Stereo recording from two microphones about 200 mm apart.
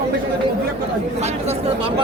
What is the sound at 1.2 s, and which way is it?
Speech, 35° right (ahead or behind).